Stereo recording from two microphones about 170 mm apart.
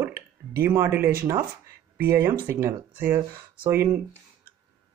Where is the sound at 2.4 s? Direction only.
10° right (ahead or behind).